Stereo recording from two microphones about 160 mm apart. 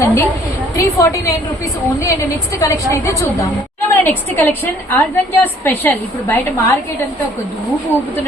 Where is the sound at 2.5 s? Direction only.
20° left (ahead or behind).